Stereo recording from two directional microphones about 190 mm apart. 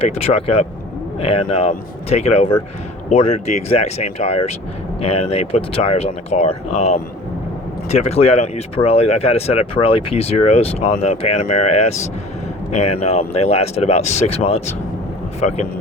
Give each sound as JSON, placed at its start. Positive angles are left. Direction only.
{"t": 0.0, "sound": "speech", "side_deg": 30}